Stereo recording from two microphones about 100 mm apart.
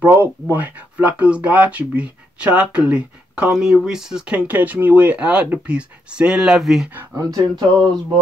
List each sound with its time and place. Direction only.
0.1 s speech: 20° right (ahead or behind); by 6.9 s 5° right (ahead or behind)
7.2 s speech: 40° right (ahead or behind)